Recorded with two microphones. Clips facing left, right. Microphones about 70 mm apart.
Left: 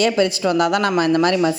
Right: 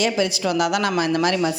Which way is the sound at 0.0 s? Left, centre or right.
Left.